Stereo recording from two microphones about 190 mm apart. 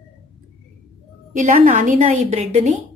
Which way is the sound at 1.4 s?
40° right (ahead or behind).